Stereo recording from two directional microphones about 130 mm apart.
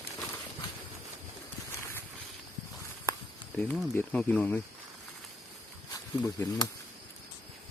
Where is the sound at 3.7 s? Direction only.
10° left (ahead or behind).